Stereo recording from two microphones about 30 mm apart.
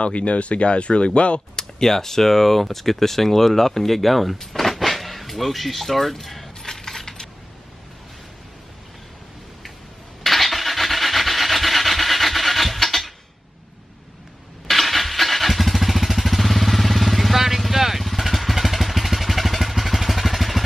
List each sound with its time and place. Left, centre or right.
0.0 s speech: left
1.6 s speech: centre
6.6 s coin: centre
10.2 s rub: centre
14.7 s motorcycle: centre
17.4 s vehicle: centre